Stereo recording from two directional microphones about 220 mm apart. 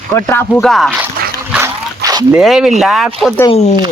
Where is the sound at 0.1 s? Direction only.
10° left (ahead or behind).